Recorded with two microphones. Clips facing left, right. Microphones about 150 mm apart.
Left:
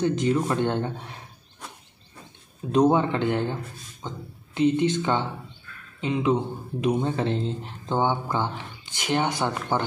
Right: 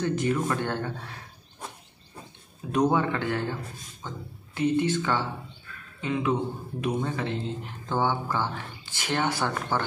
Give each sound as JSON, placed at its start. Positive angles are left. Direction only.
{"t": 0.0, "sound": "speech", "side_deg": 20}
{"t": 2.7, "sound": "speech", "side_deg": 25}
{"t": 7.9, "sound": "speech", "side_deg": 20}